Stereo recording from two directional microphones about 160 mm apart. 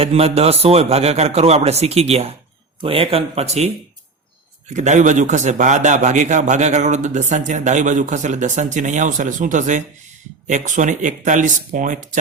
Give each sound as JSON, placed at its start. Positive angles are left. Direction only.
{"t": 0.0, "sound": "a man's voice", "side_deg": -40}
{"t": 4.7, "sound": "a man's voice", "side_deg": -50}